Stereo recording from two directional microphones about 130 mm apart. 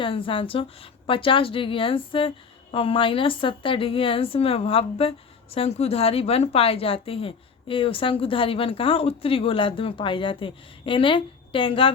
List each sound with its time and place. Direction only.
0.0 s a woman's voice: 40° left (ahead or behind)